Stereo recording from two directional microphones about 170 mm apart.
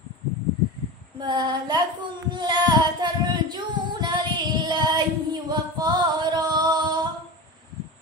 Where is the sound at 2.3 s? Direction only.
25° right (ahead or behind).